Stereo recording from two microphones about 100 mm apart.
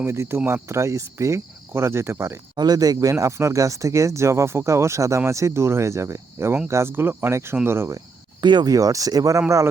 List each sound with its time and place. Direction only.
0.0 s speech: 25° right (ahead or behind)
2.6 s speech: 40° right (ahead or behind)
8.4 s speech: 45° right (ahead or behind)